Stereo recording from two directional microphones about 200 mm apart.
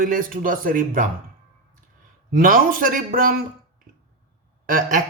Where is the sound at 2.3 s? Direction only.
45° right (ahead or behind).